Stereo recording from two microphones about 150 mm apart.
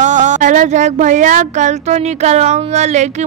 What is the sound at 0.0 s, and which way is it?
Speech, 55° right (ahead or behind).